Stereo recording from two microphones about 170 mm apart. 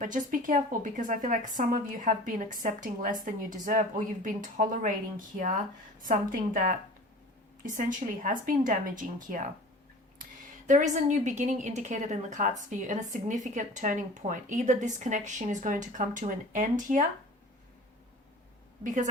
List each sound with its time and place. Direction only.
0.0 s a woman's voice: 50° right (ahead or behind)
10.7 s a woman's voice: 45° right (ahead or behind)
18.8 s a woman's voice: 50° right (ahead or behind)